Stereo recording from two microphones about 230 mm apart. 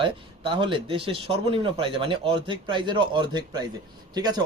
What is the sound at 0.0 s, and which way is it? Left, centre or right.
A man's voice, right.